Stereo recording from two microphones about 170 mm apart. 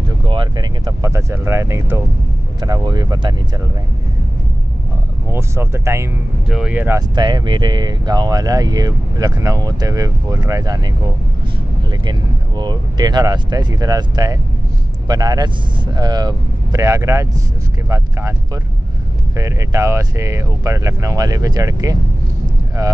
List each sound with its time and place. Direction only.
0.2 s speech: 30° right (ahead or behind)
5.3 s speech: 15° right (ahead or behind)
7.0 s speech: 25° right (ahead or behind)
11.9 s speech: 25° right (ahead or behind)